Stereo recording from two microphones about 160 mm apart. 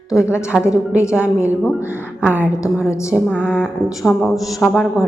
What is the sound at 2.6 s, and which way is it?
Speech, 20° left (ahead or behind).